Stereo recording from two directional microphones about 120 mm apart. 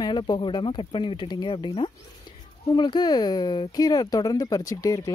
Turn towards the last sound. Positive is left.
turn(degrees=30)  # may be behind; listen again after turning